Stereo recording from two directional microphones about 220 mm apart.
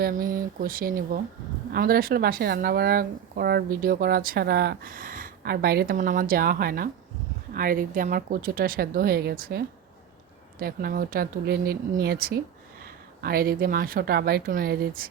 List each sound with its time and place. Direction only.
0.0 s a woman's voice: 40° right (ahead or behind)